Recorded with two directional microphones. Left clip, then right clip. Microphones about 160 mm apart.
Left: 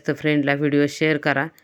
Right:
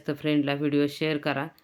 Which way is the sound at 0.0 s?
35° left (ahead or behind).